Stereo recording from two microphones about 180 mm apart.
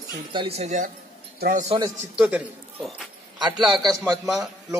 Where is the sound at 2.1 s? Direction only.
5° right (ahead or behind).